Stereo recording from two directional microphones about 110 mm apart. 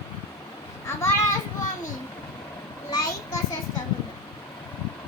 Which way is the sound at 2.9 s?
35° left (ahead or behind).